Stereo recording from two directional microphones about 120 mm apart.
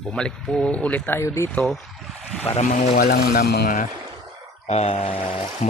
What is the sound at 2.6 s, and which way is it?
Speech, 80° left.